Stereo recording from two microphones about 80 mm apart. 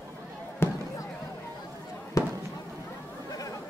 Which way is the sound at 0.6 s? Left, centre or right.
Left.